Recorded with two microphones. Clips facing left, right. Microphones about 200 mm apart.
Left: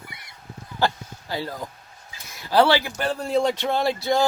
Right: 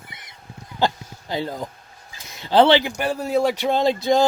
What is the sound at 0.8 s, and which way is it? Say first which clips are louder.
Speech: right 2 dB; 20° right (ahead or behind).